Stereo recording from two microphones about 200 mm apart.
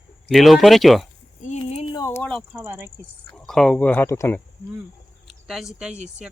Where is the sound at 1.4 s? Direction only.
35° left (ahead or behind).